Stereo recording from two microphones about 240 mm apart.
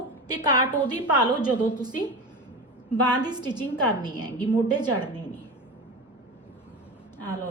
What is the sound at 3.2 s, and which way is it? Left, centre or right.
A woman's voice, centre.